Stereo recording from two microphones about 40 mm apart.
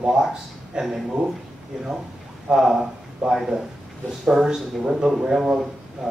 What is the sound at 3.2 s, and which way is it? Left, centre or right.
Speech, right.